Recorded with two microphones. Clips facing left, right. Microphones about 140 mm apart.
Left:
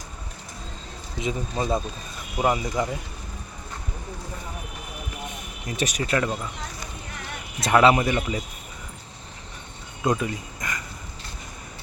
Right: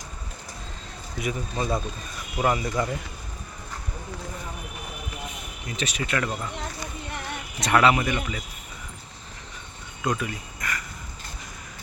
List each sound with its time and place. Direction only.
1.2 s speech: 25° left (ahead or behind)
5.6 s speech: 40° left (ahead or behind)
7.7 s speech: 25° left (ahead or behind)
10.0 s speech: 25° left (ahead or behind)